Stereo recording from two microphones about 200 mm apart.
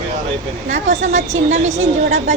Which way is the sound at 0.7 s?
35° right (ahead or behind).